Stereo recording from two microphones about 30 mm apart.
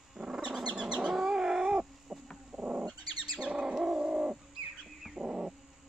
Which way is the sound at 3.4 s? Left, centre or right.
Right.